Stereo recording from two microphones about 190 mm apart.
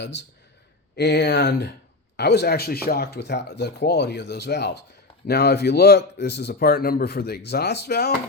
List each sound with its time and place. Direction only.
0.0 s speech: 65° left (ahead or behind)